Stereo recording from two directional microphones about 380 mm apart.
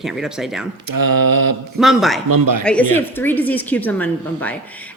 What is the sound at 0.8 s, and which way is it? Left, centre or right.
Mantra, right.